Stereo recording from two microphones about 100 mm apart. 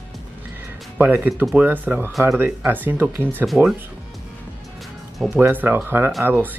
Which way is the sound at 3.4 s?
5° right (ahead or behind).